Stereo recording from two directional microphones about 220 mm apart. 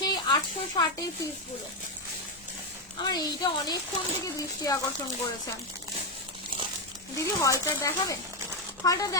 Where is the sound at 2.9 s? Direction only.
20° left (ahead or behind).